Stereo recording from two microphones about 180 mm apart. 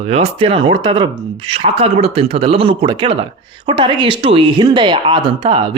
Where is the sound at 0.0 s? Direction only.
35° right (ahead or behind).